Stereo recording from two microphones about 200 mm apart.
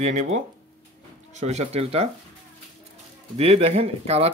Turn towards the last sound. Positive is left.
turn(degrees=-30)  # may be behind; listen again after turning